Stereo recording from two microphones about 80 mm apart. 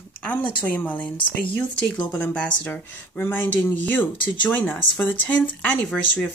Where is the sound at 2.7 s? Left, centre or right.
Left.